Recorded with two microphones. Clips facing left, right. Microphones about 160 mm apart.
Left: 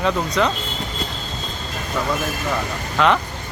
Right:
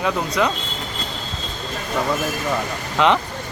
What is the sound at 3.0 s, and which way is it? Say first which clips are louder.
Speech: even; 20° right (ahead or behind).